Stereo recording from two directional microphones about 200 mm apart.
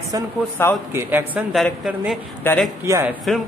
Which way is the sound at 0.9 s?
10° right (ahead or behind).